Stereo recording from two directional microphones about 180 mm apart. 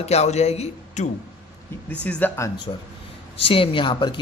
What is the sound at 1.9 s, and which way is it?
Speech, 10° left (ahead or behind).